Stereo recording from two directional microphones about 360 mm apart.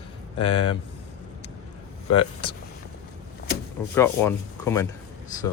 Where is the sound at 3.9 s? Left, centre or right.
Centre.